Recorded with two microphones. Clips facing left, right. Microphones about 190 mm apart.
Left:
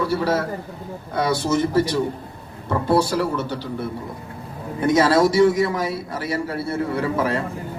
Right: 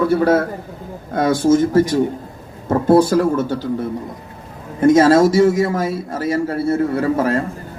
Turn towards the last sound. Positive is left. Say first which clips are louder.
# right 5 dB
turn(degrees=-45)  # may be behind; listen again after turning